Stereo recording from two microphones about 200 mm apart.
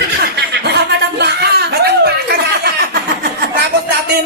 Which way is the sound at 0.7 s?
55° right (ahead or behind).